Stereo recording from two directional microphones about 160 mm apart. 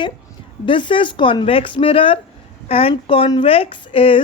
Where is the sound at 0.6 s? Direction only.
30° left (ahead or behind).